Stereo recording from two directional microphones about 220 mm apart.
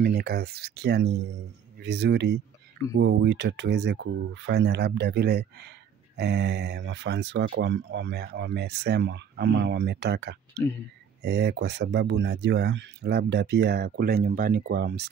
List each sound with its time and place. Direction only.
0.0 s speech: 45° right (ahead or behind)